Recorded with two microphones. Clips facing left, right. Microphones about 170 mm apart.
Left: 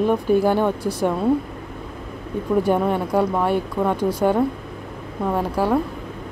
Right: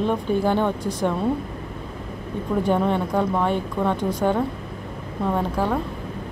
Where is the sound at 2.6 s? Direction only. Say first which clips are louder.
Right 1 dB; 10° left (ahead or behind).